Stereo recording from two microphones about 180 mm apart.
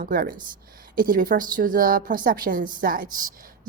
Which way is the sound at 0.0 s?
50° right (ahead or behind).